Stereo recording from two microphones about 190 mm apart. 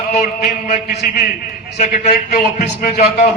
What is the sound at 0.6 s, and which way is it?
A man's voice, 40° left (ahead or behind).